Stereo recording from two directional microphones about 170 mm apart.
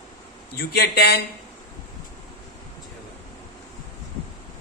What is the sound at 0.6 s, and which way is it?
Speech, 70° left (ahead or behind).